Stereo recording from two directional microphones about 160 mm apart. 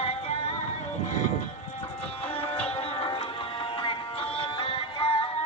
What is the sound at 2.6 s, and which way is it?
Music, 35° left (ahead or behind).